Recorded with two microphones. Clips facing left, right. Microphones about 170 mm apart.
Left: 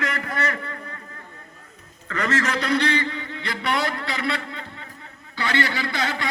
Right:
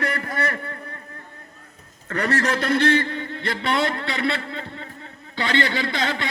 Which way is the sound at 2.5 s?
50° right (ahead or behind).